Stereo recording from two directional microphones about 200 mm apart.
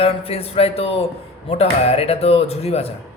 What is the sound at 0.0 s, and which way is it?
Speech, 30° left (ahead or behind).